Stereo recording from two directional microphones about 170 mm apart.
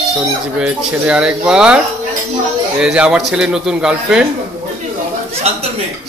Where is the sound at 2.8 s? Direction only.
5° right (ahead or behind).